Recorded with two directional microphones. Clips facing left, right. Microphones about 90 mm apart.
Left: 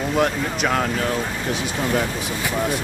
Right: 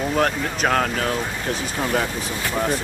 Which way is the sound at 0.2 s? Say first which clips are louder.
Left 1 dB; 50° right (ahead or behind).